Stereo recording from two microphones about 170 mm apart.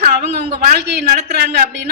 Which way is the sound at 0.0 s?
55° right (ahead or behind).